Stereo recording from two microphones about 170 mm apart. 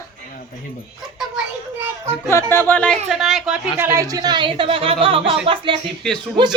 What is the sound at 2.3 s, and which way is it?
Speech, 15° left (ahead or behind).